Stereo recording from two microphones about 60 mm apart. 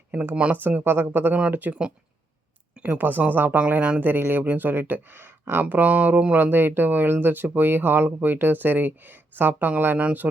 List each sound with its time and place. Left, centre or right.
0.1 s speech: right
3.0 s speech: right
4.0 s speech: right